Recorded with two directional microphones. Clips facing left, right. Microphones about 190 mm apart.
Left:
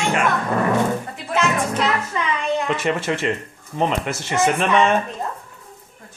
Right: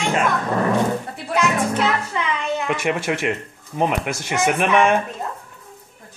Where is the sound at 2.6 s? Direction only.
10° right (ahead or behind).